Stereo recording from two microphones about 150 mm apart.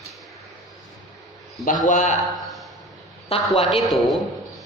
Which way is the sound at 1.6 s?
60° left (ahead or behind).